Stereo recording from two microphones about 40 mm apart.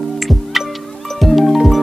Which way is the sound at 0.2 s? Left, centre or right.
Centre.